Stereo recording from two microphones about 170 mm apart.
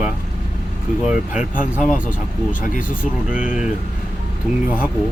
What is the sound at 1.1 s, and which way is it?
Speech, 5° right (ahead or behind).